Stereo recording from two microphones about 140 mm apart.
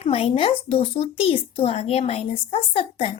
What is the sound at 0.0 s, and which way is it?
Speech, 45° left (ahead or behind).